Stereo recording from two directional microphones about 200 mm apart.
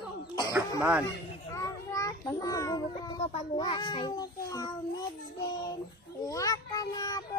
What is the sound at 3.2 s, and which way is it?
A child's voice, 25° left (ahead or behind).